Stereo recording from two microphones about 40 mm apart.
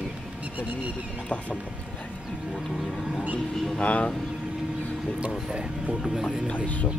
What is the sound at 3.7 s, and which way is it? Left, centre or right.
Speech, left.